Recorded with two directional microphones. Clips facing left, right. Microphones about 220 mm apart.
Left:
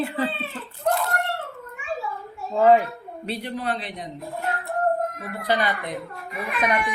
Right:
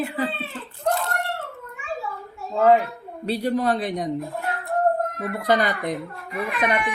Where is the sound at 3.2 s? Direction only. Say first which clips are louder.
Right 7 dB; 40° right (ahead or behind).